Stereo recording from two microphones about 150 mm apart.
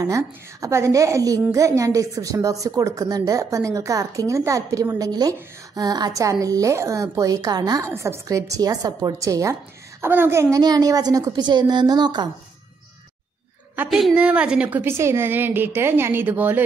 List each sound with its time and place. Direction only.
0.0 s a woman's voice: 20° right (ahead or behind)
13.8 s a woman's voice: centre (ahead or behind)